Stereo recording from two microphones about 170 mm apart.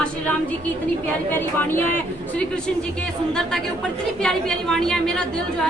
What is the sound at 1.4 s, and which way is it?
Speech, 10° left (ahead or behind).